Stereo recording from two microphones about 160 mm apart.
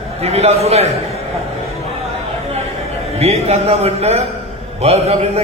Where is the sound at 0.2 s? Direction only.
40° right (ahead or behind).